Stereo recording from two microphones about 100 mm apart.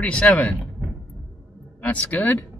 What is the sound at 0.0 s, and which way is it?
Speech, 15° left (ahead or behind).